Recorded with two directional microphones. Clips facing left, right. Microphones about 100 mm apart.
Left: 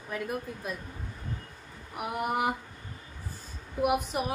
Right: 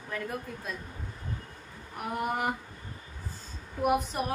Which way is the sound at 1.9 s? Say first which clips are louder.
Left 1 dB; 10° left (ahead or behind).